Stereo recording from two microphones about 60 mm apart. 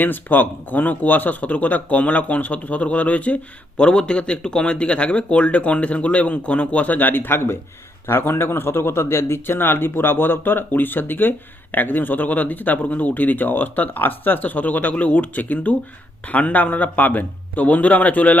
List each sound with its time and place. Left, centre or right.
0.0 s a man's voice: left